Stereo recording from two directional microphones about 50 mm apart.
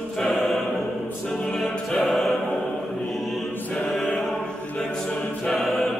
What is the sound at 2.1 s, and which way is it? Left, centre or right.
Choir, centre.